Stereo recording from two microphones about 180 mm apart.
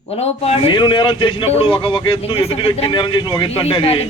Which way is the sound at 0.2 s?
30° left (ahead or behind).